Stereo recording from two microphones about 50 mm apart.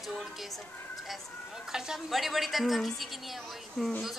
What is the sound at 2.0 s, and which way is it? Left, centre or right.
A woman's voice, centre.